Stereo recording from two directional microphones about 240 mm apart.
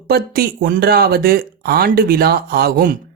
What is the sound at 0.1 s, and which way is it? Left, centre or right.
Speech, right.